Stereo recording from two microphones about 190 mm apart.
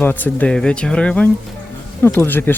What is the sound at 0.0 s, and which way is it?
Speech, 10° left (ahead or behind).